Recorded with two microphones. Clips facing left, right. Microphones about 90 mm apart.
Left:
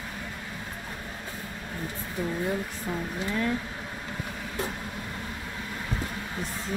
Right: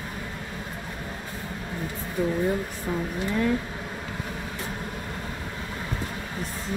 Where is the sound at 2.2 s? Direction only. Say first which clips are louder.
Right 6 dB; 20° right (ahead or behind).